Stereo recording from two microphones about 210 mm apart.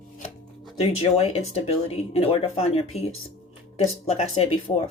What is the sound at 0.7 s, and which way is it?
Speech, 30° left (ahead or behind).